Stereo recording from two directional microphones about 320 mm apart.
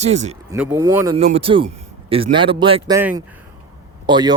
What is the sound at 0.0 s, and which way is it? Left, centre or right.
Speech, right.